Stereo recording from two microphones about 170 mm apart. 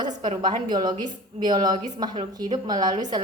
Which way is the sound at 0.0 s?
25° right (ahead or behind).